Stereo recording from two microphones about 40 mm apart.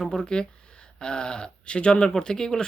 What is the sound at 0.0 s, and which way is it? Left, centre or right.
Speech, centre.